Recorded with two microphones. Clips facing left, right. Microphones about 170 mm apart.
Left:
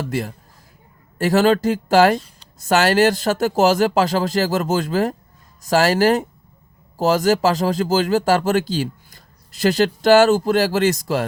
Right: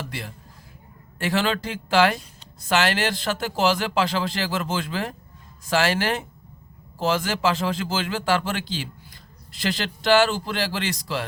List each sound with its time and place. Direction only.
0.1 s speech: 45° left (ahead or behind)